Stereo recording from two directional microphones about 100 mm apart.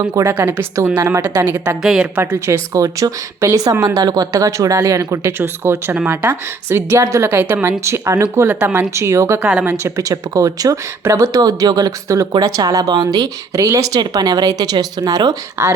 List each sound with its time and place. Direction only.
0.1 s a woman's voice: 35° right (ahead or behind)
0.3 s a woman's voice: 20° right (ahead or behind)
0.9 s a woman's voice: 30° right (ahead or behind)
1.8 s a woman's voice: 5° right (ahead or behind)
2.1 s a woman's voice: 20° right (ahead or behind)
8.5 s speech: 20° right (ahead or behind)
9.4 s a woman's voice: 10° right (ahead or behind)
9.6 s a woman's voice: 30° right (ahead or behind)
15.6 s speech: 25° right (ahead or behind)